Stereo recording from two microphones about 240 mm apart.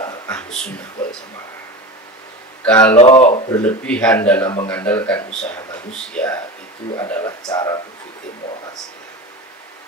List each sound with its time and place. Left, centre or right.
0.3 s a sound: centre
2.6 s speech: centre
3.0 s speech: left
3.4 s a man's voice: centre